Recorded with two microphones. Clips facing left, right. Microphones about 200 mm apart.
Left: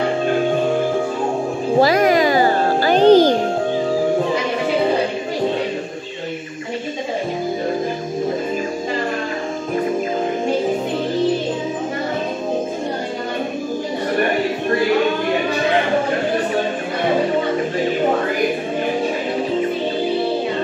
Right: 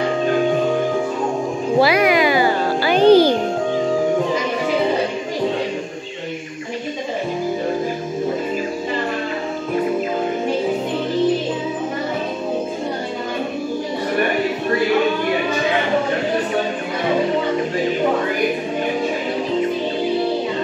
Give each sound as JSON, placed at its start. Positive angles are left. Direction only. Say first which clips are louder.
{"t": 1.8, "sound": "music", "louder": "left 1 dB", "side_deg": 45}